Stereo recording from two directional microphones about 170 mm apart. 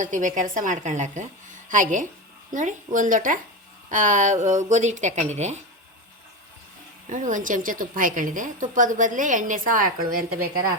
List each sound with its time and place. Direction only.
0.0 s a woman's voice: 50° right (ahead or behind)
7.1 s a woman's voice: 50° right (ahead or behind)